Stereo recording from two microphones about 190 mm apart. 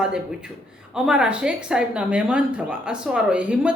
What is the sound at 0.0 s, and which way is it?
Speech, 5° right (ahead or behind).